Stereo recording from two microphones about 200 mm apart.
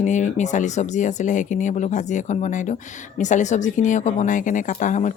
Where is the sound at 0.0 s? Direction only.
35° left (ahead or behind).